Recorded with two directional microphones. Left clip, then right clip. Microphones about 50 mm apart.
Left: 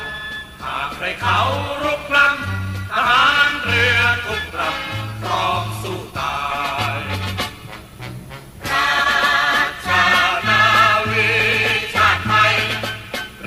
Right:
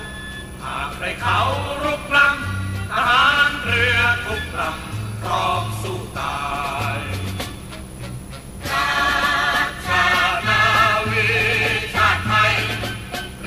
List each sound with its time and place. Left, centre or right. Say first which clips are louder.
0.6 s music: left 2 dB; centre; by 3.8 s left
3.8 s music: left 2 dB; centre
5.2 s music: left 1 dB; left
8.6 s music: left 2 dB; left
9.6 s music: left 2 dB; left
12.5 s music: left 3 dB; left